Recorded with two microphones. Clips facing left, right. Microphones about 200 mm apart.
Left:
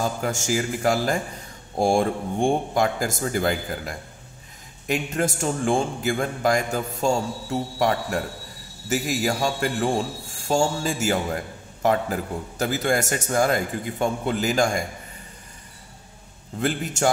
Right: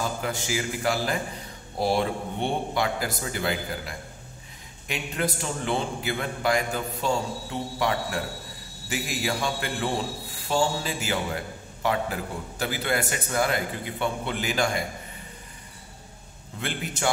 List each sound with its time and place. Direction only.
0.0 s a man's voice: 45° left (ahead or behind)
16.5 s a man's voice: 40° left (ahead or behind)